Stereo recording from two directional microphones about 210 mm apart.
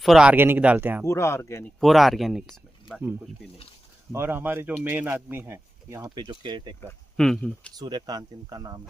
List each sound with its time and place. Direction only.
0.0 s speech: centre (ahead or behind)
1.0 s speech: 15° left (ahead or behind)
1.8 s speech: centre (ahead or behind); by 6.7 s 20° right (ahead or behind)
7.2 s speech: 5° left (ahead or behind)
7.7 s speech: 20° right (ahead or behind)